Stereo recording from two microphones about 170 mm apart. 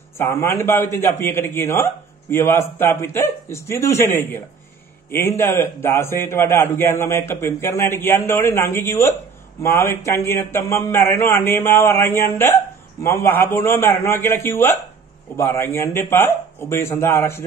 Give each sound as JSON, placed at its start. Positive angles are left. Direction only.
{"t": 0.2, "sound": "a man's voice", "side_deg": 15}